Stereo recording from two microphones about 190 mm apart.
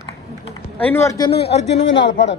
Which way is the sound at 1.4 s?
35° left (ahead or behind).